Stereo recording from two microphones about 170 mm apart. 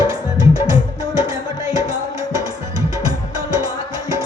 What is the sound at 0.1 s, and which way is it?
Music, 20° right (ahead or behind).